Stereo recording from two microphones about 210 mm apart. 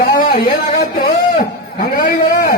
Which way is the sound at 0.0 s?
45° left (ahead or behind).